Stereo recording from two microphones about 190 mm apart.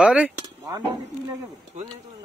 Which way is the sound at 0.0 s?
5° right (ahead or behind).